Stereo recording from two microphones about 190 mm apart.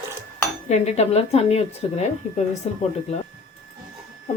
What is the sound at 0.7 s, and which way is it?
Speech, 35° left (ahead or behind).